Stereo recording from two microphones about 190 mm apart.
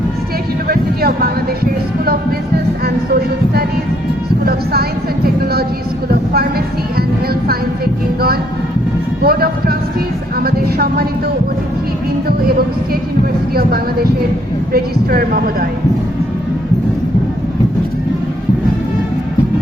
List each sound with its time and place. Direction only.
0.7 s music: 55° right (ahead or behind)
2.8 s music: 55° right (ahead or behind)
4.4 s a sound: 55° right (ahead or behind)
9.2 s speech: 55° right (ahead or behind)
10.4 s a sound: 55° right (ahead or behind)
13.5 s speech: 55° right (ahead or behind)